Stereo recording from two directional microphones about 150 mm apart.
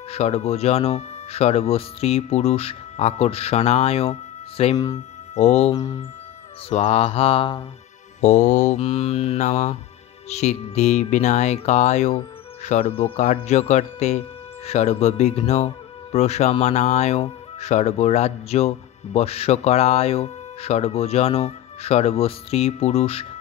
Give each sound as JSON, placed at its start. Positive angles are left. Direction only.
{"t": 0.1, "sound": "speech", "side_deg": 45}
{"t": 5.3, "sound": "music", "side_deg": 50}
{"t": 6.7, "sound": "mantra", "side_deg": 45}
{"t": 8.2, "sound": "speech", "side_deg": 50}
{"t": 12.8, "sound": "speech", "side_deg": 40}